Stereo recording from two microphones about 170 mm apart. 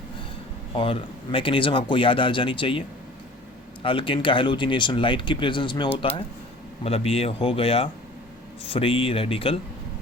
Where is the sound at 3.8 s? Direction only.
30° left (ahead or behind).